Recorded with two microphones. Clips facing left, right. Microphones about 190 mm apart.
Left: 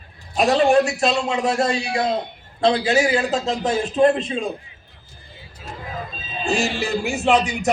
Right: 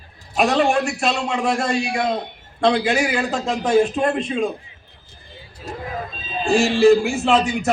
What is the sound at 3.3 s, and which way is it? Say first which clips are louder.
Speech: right 3 dB; 35° left (ahead or behind).